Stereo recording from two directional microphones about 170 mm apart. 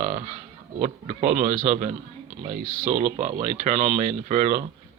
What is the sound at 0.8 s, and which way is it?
A man's voice, 45° right (ahead or behind).